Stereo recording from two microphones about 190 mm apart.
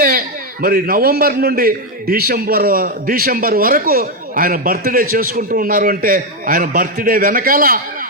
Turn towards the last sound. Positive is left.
turn(degrees=-50)  # may be behind; listen again after turning